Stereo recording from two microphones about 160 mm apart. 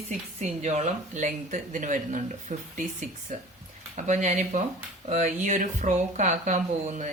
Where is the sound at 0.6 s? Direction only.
45° right (ahead or behind).